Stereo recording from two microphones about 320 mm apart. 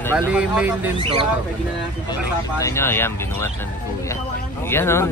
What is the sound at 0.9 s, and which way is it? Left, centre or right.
Speech, centre.